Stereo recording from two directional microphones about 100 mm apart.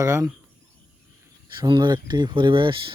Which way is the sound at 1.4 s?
50° right (ahead or behind).